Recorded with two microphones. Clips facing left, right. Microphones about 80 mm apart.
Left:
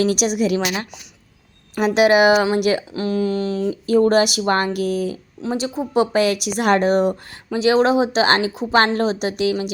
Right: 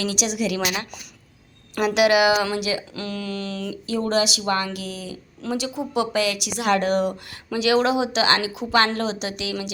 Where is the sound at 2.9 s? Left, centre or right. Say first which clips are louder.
Left 9 dB; left.